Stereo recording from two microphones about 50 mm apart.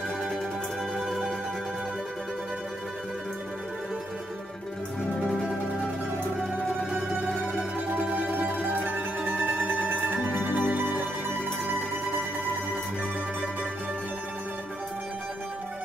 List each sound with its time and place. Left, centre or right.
0.9 s music: centre
8.9 s mandolin: right
9.8 s music: right